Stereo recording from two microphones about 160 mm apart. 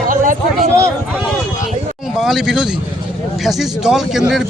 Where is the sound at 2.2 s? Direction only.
Centre (ahead or behind).